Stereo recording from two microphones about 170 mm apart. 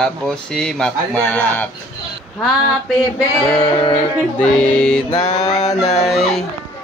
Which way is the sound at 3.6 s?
35° left (ahead or behind).